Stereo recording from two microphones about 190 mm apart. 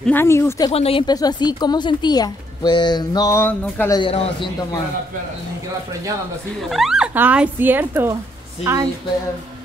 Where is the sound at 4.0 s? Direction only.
30° left (ahead or behind).